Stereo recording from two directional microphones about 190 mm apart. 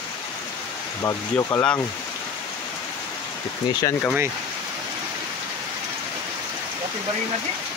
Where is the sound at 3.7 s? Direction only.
20° left (ahead or behind).